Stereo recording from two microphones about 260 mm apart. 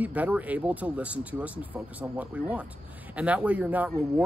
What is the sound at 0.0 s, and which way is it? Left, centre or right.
Speech, centre.